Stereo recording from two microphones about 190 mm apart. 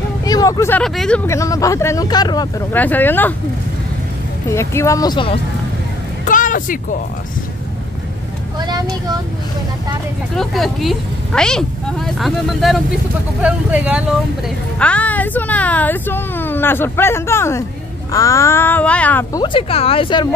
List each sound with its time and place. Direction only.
0.2 s speech: 20° left (ahead or behind); by 1.2 s 5° left (ahead or behind)
1.2 s speech: 15° left (ahead or behind)
2.7 s speech: 10° left (ahead or behind)
4.5 s speech: 15° left (ahead or behind)
6.2 s speech: 45° left (ahead or behind)
8.5 s speech: 20° right (ahead or behind)
10.3 s speech: centre (ahead or behind)
14.8 s speech: 5° left (ahead or behind)
19.3 s speech: 25° left (ahead or behind)